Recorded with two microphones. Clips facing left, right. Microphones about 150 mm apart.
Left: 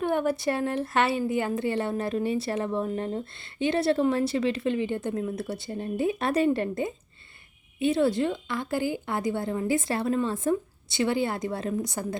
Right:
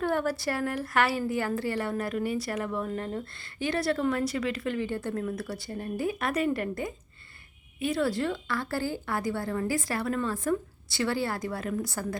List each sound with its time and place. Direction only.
0.0 s a woman's voice: 20° left (ahead or behind)